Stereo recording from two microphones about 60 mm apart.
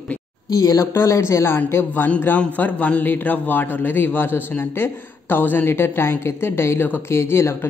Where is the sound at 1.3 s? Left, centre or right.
Left.